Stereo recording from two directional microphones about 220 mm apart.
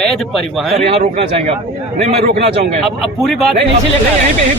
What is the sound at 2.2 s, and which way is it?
Speech, 45° right (ahead or behind).